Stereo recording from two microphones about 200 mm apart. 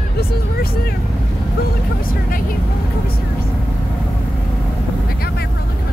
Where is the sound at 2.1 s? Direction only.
45° left (ahead or behind).